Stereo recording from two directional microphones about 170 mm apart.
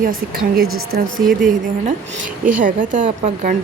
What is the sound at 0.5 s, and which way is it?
Speech, 65° right (ahead or behind).